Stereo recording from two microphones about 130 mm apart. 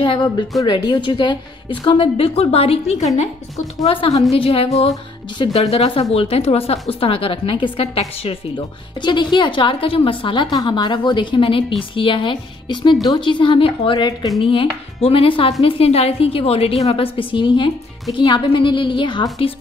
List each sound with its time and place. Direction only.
0.0 s a woman's voice: 40° left (ahead or behind)